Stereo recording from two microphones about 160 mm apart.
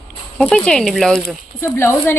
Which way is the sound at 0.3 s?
5° left (ahead or behind).